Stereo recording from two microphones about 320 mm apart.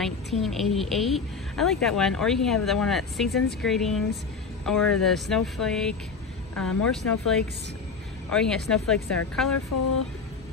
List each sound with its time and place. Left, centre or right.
0.0 s a woman's voice: centre
9.7 s speech: left